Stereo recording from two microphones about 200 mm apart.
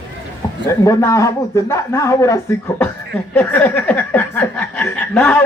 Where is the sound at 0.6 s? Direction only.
15° left (ahead or behind).